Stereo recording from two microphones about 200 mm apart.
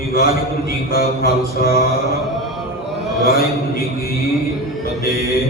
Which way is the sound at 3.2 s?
50° left (ahead or behind).